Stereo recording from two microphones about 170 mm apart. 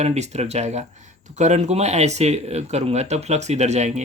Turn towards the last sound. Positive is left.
turn(degrees=-40)  # may be behind; listen again after turning